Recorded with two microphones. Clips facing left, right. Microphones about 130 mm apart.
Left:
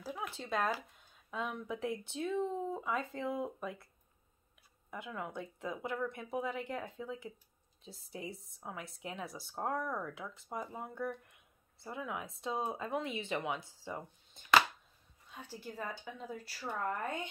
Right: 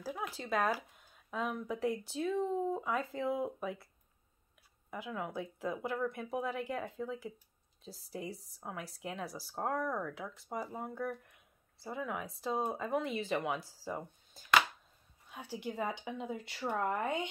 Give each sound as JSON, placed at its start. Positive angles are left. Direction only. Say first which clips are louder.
{"t": 0.3, "sound": "speech", "louder": "right 2 dB", "side_deg": -5}
{"t": 4.9, "sound": "speech", "louder": "right 2 dB", "side_deg": 0}
{"t": 15.3, "sound": "speech", "louder": "right 6 dB", "side_deg": -15}